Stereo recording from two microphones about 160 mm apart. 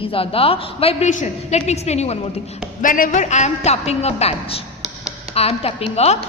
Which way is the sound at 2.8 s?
55° left (ahead or behind).